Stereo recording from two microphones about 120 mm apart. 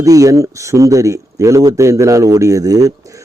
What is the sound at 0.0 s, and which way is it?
Speech, 30° right (ahead or behind).